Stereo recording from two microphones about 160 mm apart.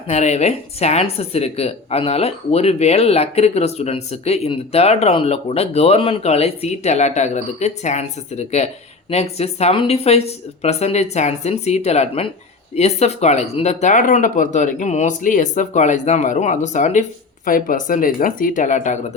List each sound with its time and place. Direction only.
0.1 s speech: 45° left (ahead or behind)